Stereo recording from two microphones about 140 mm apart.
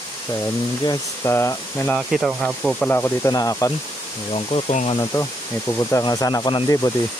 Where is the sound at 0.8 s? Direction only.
25° left (ahead or behind).